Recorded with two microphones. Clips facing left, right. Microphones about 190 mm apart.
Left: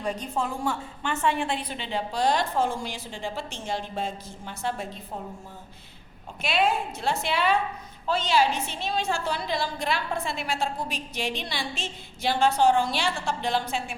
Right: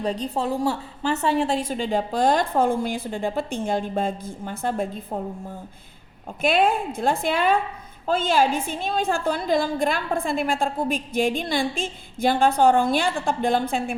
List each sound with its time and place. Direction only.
0.0 s a woman's voice: 35° right (ahead or behind); by 5.2 s 50° right (ahead or behind)
6.4 s a woman's voice: 50° right (ahead or behind)